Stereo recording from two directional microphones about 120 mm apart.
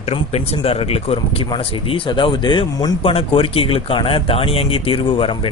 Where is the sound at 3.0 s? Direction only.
50° left (ahead or behind).